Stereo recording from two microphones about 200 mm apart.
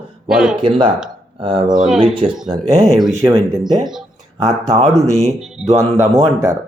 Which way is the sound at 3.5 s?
20° right (ahead or behind).